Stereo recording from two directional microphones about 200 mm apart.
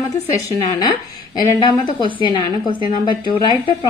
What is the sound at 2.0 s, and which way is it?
A woman's voice, 20° left (ahead or behind).